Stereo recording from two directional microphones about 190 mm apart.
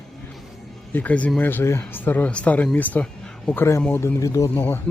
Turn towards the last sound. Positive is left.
turn(degrees=10)  # may be behind; listen again after turning